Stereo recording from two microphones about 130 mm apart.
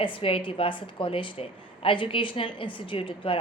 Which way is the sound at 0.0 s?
40° left (ahead or behind).